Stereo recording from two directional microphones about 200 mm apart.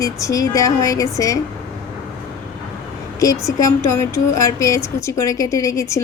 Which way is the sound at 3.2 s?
15° left (ahead or behind).